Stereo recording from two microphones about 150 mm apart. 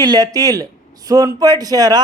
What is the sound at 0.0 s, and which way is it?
Speech, 25° right (ahead or behind).